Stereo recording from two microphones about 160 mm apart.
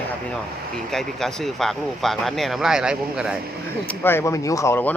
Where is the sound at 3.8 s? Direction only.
10° left (ahead or behind).